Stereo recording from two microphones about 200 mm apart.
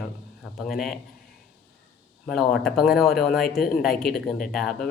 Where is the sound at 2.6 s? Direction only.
Centre (ahead or behind).